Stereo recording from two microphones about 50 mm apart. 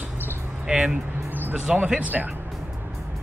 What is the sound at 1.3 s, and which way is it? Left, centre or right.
Music, right.